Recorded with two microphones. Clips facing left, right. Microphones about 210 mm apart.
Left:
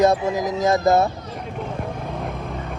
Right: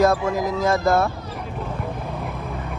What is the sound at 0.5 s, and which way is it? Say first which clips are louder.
Speech: left 3 dB; 20° left (ahead or behind).